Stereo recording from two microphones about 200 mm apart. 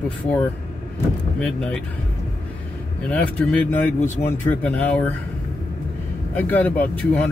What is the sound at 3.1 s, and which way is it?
Speech, 5° left (ahead or behind).